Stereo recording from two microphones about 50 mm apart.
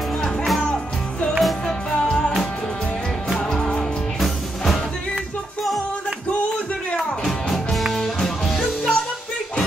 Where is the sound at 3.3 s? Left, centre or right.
Centre.